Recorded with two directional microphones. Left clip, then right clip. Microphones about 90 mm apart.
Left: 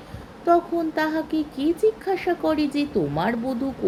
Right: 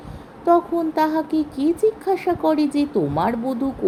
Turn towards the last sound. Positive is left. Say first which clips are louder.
# right 3 dB
turn(degrees=-35)  # may be behind; listen again after turning